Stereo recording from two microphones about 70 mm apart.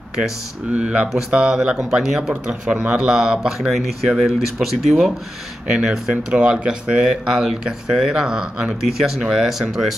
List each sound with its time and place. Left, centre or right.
0.7 s speech: centre